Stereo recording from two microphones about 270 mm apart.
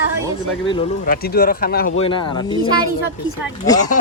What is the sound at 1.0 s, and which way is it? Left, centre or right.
Speech, left.